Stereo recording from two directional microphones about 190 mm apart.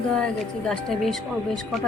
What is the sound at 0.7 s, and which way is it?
Speech, centre (ahead or behind).